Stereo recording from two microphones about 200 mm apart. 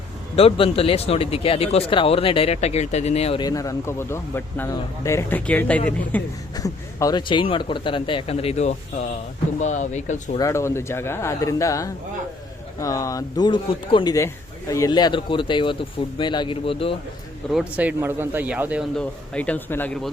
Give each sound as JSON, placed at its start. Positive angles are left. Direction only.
{"t": 0.3, "sound": "speech", "side_deg": 30}
{"t": 6.6, "sound": "speech", "side_deg": 20}
{"t": 10.3, "sound": "speech", "side_deg": 15}
{"t": 17.5, "sound": "speech", "side_deg": -5}
{"t": 18.9, "sound": "speech", "side_deg": 5}